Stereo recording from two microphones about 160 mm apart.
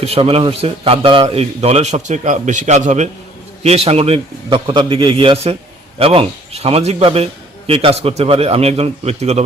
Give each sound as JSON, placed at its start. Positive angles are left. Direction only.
{"t": 0.0, "sound": "a man's voice", "side_deg": -35}